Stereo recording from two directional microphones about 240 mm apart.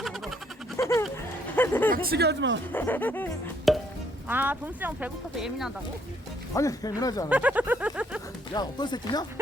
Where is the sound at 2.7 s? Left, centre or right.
Centre.